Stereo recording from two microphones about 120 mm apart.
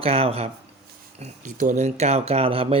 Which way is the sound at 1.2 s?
90° right.